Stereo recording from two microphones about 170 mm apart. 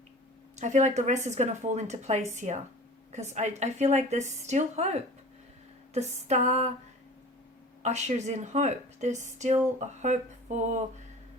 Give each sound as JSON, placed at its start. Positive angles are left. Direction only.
{"t": 0.6, "sound": "speech", "side_deg": -45}
{"t": 7.8, "sound": "speech", "side_deg": -40}